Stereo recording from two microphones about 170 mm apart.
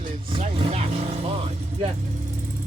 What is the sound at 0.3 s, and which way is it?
Vehicle, 30° right (ahead or behind).